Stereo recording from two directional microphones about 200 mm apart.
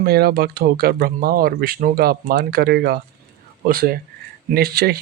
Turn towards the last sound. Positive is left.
turn(degrees=-50)  # may be behind; listen again after turning